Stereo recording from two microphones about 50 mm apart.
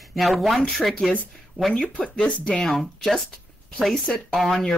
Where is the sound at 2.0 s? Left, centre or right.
Centre.